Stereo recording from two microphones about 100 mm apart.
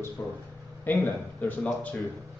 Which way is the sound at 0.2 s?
25° left (ahead or behind).